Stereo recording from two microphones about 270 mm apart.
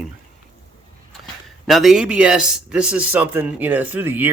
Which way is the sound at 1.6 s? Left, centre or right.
Centre.